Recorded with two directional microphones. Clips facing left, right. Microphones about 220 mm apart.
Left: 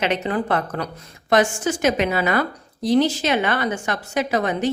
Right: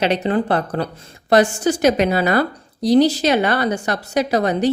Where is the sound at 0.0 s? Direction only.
35° right (ahead or behind).